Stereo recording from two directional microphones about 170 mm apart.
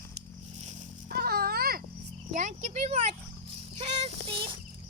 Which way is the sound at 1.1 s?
65° right (ahead or behind).